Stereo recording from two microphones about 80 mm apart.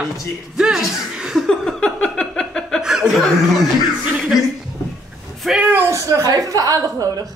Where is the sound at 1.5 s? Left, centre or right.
Centre.